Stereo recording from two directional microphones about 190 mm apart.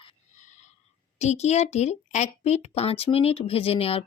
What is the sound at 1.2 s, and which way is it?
Speech, 35° left (ahead or behind).